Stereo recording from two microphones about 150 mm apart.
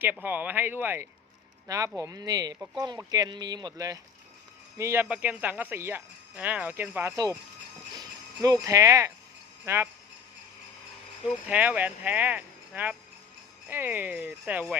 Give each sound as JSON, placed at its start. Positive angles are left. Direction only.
{"t": 0.0, "sound": "speech", "side_deg": -10}
{"t": 7.9, "sound": "speech", "side_deg": -25}
{"t": 11.4, "sound": "speech", "side_deg": -10}